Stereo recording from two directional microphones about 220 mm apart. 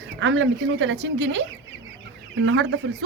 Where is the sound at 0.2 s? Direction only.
60° right (ahead or behind).